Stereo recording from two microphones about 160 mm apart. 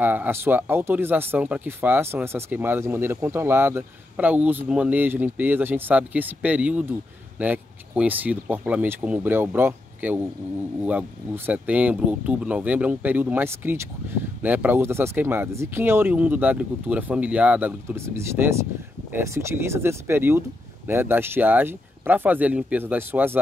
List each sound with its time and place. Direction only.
0.0 s speech: 10° right (ahead or behind)